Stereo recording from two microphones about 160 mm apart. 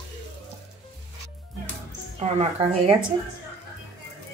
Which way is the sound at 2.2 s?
40° right (ahead or behind).